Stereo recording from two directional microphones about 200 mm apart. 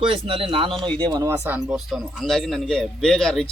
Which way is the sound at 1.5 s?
5° right (ahead or behind).